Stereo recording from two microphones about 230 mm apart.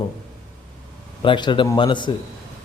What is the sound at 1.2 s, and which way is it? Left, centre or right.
Speech, centre.